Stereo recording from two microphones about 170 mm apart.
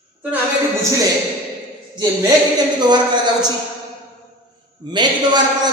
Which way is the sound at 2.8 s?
25° right (ahead or behind).